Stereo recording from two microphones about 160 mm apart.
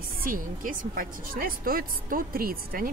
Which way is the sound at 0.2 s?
60° right (ahead or behind).